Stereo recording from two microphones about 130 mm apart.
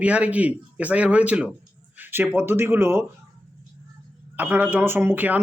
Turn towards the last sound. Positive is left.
turn(degrees=-15)  # may be behind; listen again after turning